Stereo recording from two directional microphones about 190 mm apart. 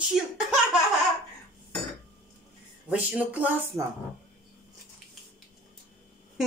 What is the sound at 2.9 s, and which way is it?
Speech, 5° right (ahead or behind).